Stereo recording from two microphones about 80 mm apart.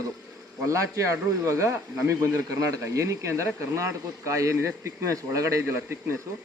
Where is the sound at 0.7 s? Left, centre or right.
Right.